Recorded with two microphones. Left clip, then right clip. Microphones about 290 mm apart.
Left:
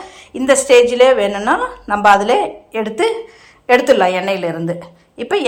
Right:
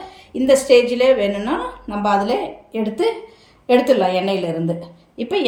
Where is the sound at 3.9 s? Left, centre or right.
Left.